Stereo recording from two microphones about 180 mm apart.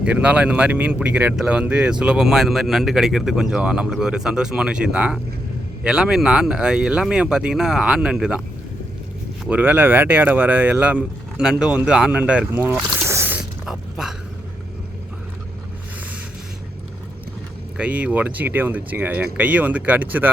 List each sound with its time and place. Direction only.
0.0 s speech: 5° right (ahead or behind)
9.4 s speech: 10° right (ahead or behind)
17.7 s speech: 5° right (ahead or behind)